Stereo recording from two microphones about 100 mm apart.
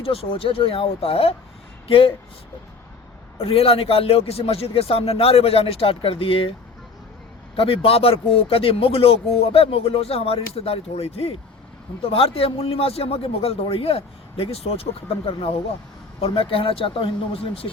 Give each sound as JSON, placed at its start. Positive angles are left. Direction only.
{"t": 0.0, "sound": "speech", "side_deg": 70}
{"t": 3.3, "sound": "speech", "side_deg": 75}
{"t": 7.5, "sound": "speech", "side_deg": 65}
{"t": 12.0, "sound": "speech", "side_deg": 75}